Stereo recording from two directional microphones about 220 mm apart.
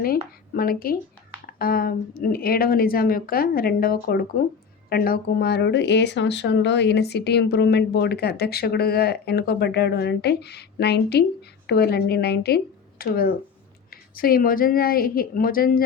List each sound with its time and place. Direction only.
0.5 s speech: 40° left (ahead or behind)